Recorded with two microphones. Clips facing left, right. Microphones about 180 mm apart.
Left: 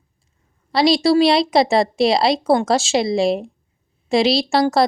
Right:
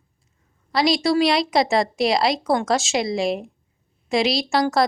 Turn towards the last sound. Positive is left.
turn(degrees=30)  # may be behind; listen again after turning